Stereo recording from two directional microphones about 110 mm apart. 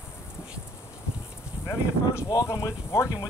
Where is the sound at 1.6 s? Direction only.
30° left (ahead or behind).